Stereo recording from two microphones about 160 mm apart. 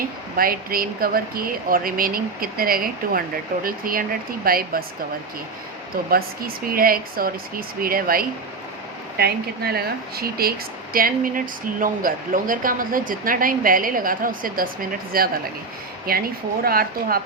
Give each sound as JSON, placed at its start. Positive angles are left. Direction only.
{"t": 0.0, "sound": "speech", "side_deg": -65}
{"t": 6.1, "sound": "speech", "side_deg": -65}
{"t": 9.1, "sound": "speech", "side_deg": -75}
{"t": 10.9, "sound": "speech", "side_deg": -60}